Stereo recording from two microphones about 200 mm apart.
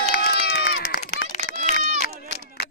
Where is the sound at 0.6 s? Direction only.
45° left (ahead or behind).